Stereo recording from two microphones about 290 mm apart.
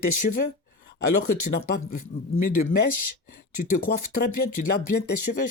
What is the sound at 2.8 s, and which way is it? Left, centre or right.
Speech, left.